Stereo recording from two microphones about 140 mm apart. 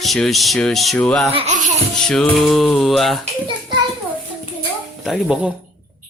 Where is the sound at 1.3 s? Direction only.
45° right (ahead or behind).